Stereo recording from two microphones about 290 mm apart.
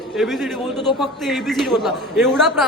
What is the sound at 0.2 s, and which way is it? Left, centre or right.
A man's voice, centre.